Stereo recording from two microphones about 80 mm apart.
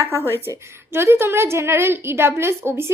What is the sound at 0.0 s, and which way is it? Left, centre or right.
A woman's voice, right.